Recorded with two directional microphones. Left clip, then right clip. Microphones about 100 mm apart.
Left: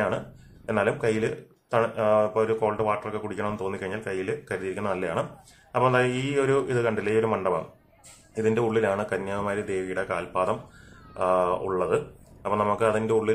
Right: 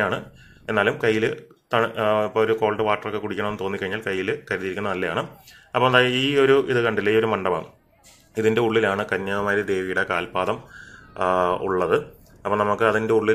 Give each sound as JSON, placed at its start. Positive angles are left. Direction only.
{"t": 0.7, "sound": "speech", "side_deg": -20}